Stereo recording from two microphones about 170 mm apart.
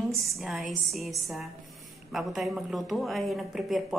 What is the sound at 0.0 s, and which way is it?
Speech, centre (ahead or behind).